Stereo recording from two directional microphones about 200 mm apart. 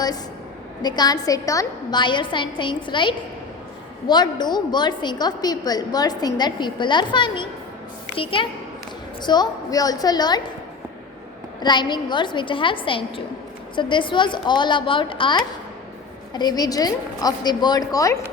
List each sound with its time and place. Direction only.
0.8 s a woman's voice: 20° left (ahead or behind)
11.6 s a woman's voice: 20° left (ahead or behind)